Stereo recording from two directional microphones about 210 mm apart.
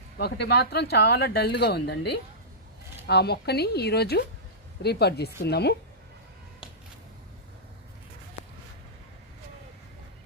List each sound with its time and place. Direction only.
0.2 s speech: 50° left (ahead or behind)